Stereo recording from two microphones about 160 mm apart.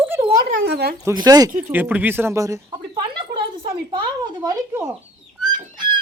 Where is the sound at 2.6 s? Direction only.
30° right (ahead or behind).